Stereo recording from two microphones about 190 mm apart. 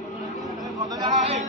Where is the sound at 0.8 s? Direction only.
20° right (ahead or behind).